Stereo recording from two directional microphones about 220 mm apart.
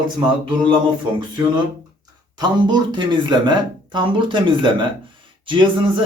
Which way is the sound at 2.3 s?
20° right (ahead or behind).